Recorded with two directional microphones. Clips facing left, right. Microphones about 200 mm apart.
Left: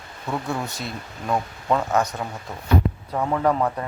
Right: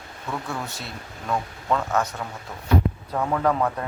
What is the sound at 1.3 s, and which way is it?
Speech, 20° left (ahead or behind).